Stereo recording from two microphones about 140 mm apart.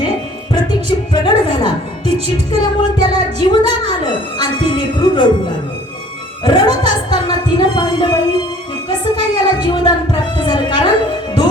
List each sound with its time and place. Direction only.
0.5 s music: 30° left (ahead or behind)
2.5 s speech: 30° left (ahead or behind)
6.4 s speech: 30° left (ahead or behind)